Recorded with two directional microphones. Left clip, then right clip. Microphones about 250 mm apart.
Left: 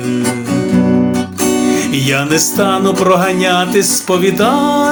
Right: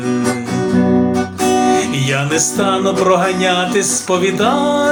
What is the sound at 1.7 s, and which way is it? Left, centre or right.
Music, left.